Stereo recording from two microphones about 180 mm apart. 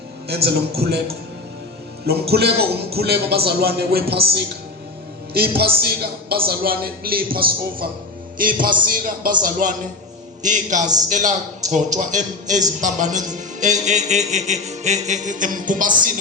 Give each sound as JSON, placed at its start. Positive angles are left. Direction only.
{"t": 0.3, "sound": "a man's voice", "side_deg": -60}
{"t": 13.8, "sound": "music", "side_deg": -40}